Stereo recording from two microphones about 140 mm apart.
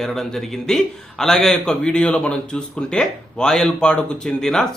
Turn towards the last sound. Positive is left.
turn(degrees=5)  # may be behind; listen again after turning